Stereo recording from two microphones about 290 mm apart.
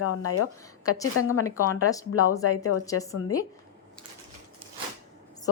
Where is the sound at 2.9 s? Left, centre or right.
Centre.